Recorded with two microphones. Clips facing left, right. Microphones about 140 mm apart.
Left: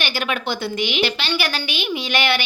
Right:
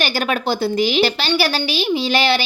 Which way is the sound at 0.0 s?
40° right (ahead or behind).